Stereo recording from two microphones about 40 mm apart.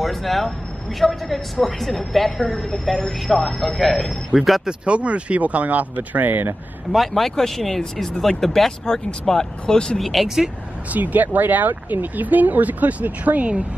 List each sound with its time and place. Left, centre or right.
0.0 s a woman's voice: centre
4.6 s speech: right
6.9 s speech: centre
9.9 s a woman's voice: centre
10.2 s speech: centre
10.9 s speech: right